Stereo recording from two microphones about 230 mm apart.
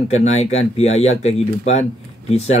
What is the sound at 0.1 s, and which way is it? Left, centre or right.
Speech, left.